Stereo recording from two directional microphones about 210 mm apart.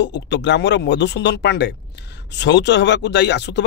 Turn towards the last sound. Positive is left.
turn(degrees=55)  # may be behind; listen again after turning